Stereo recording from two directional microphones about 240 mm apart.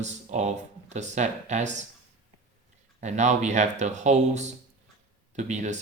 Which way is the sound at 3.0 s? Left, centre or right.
Right.